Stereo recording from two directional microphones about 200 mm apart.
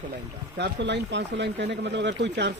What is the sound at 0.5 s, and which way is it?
Speech, 60° right (ahead or behind).